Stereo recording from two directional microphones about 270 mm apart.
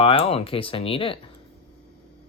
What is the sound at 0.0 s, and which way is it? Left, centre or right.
Speech, left.